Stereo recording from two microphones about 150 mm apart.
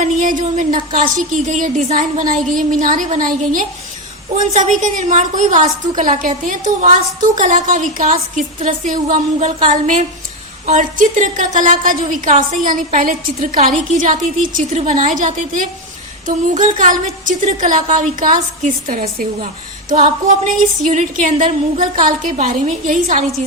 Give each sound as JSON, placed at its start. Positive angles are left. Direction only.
{"t": 0.0, "sound": "a woman's voice", "side_deg": -60}